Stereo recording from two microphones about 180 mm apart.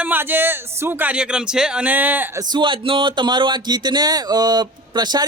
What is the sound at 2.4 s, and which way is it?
Speech, 25° right (ahead or behind).